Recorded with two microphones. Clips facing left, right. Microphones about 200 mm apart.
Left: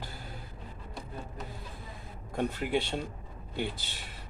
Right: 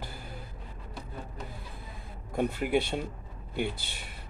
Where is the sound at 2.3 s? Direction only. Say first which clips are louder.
Right 2 dB; 10° right (ahead or behind).